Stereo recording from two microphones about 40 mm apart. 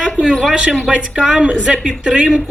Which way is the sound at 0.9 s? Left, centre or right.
Right.